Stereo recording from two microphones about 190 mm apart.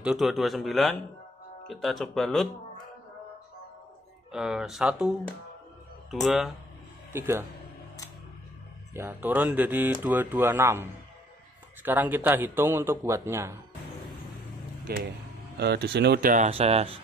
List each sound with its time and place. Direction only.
0.0 s speech: centre (ahead or behind)
4.3 s speech: 5° right (ahead or behind)
6.2 s speech: centre (ahead or behind)
7.1 s a man's voice: 10° right (ahead or behind)
8.9 s a man's voice: 10° right (ahead or behind)
14.9 s speech: 55° right (ahead or behind)
16.4 s speech: 30° right (ahead or behind)